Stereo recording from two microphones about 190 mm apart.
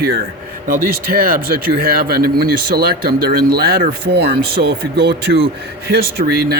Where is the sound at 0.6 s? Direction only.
50° right (ahead or behind).